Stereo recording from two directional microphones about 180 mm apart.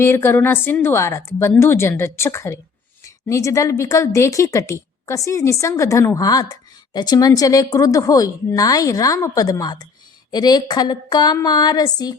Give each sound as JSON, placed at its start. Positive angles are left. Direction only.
{"t": 0.0, "sound": "a woman's voice", "side_deg": 15}